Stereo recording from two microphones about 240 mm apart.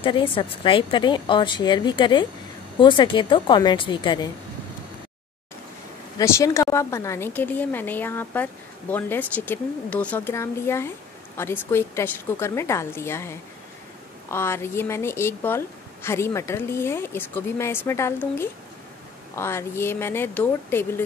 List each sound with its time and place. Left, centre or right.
0.0 s a woman's voice: left
6.1 s a woman's voice: centre